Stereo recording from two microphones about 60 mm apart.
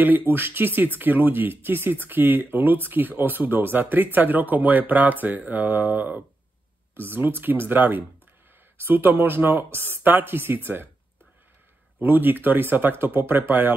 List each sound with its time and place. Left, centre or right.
0.0 s speech: right
12.0 s speech: right